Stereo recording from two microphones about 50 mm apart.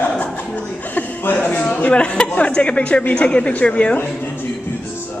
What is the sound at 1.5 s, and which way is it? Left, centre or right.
Speech, left.